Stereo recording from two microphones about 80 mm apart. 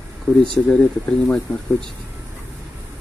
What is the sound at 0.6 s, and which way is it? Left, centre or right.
Speech, centre.